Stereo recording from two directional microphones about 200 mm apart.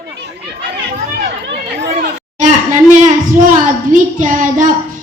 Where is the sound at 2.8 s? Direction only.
40° right (ahead or behind).